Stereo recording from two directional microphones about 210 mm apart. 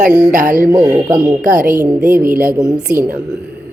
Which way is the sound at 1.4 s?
40° right (ahead or behind).